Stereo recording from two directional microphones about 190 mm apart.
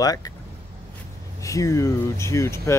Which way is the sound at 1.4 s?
15° left (ahead or behind).